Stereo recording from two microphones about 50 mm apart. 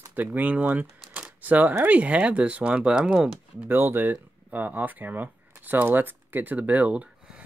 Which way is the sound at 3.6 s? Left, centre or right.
Right.